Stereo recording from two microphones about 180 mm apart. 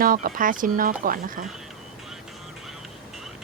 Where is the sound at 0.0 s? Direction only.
50° right (ahead or behind).